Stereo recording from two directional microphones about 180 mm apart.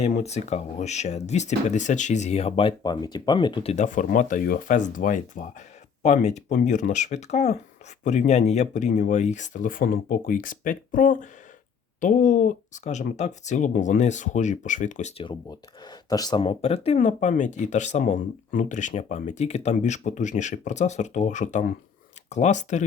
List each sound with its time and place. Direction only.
0.2 s speech: 40° left (ahead or behind)
15.2 s speech: 25° left (ahead or behind); by 22.9 s 40° left (ahead or behind)